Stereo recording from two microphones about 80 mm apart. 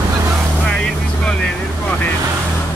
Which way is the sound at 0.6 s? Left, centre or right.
Centre.